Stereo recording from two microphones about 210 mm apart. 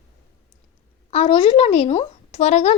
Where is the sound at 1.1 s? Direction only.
25° left (ahead or behind).